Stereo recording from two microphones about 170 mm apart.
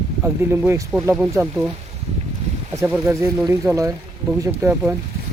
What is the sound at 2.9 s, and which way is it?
Speech, 15° right (ahead or behind).